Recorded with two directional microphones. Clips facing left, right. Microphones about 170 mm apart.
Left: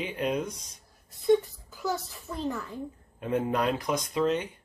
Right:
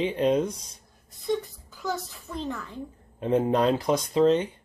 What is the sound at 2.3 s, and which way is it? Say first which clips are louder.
Speech: right 1 dB; centre (ahead or behind).